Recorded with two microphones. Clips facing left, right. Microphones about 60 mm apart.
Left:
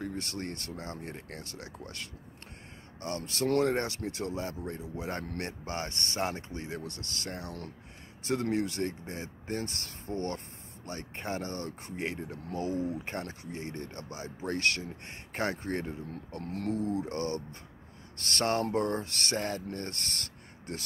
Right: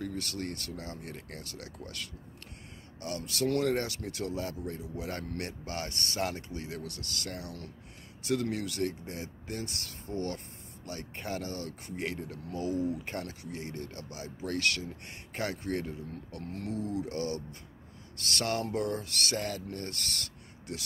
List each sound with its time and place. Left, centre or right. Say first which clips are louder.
0.0 s speech: even; left